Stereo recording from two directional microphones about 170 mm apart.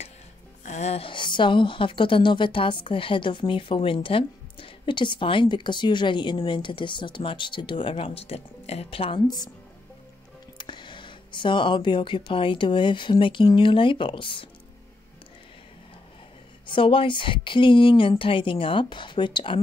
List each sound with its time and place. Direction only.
0.7 s a woman's voice: 40° left (ahead or behind)
10.6 s a woman's voice: 25° left (ahead or behind)
16.6 s a woman's voice: 30° left (ahead or behind)